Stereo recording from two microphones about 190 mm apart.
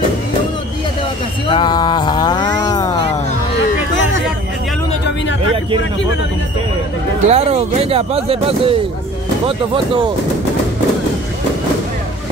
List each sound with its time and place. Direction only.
1.5 s speech: 25° left (ahead or behind)
7.2 s speech: 35° right (ahead or behind)